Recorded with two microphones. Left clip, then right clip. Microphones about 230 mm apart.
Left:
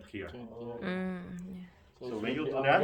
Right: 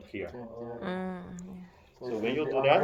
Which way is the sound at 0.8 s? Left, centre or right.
Centre.